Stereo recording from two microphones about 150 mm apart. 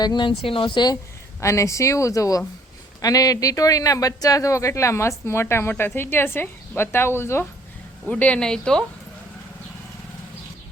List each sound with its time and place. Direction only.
0.0 s speech: 30° left (ahead or behind)
1.4 s a woman's voice: 20° left (ahead or behind); by 8.8 s 5° left (ahead or behind)